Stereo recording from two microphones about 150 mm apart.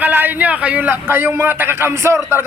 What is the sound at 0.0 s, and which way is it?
A man's voice, 10° right (ahead or behind).